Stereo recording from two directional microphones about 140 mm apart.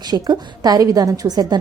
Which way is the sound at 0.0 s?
30° right (ahead or behind).